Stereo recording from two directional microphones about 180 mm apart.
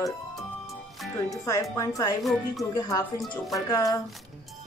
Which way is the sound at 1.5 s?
20° left (ahead or behind).